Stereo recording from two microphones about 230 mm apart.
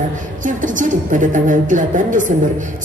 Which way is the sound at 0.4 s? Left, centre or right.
Right.